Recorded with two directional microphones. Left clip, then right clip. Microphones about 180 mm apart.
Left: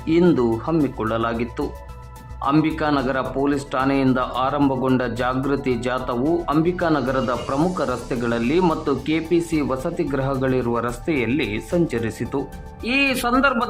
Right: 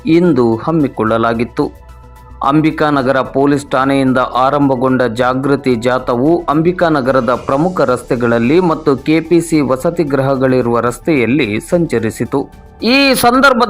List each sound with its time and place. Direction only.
0.0 s speech: 30° right (ahead or behind)